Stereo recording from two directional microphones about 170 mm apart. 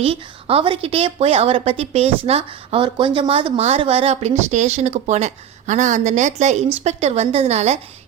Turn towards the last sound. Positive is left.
turn(degrees=-40)  # may be behind; listen again after turning